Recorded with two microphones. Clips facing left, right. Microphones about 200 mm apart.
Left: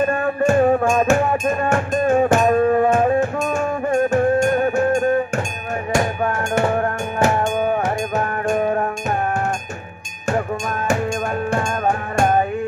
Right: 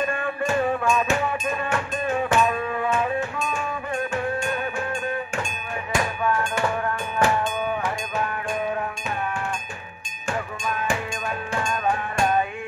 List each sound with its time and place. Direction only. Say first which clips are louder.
0.0 s music: left 8 dB; 45° left (ahead or behind)
10.3 s cowbell: left 6 dB; 45° left (ahead or behind)
11.5 s music: left 1 dB; 50° left (ahead or behind)